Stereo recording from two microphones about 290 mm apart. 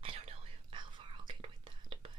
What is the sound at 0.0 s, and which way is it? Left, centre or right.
Whispering, right.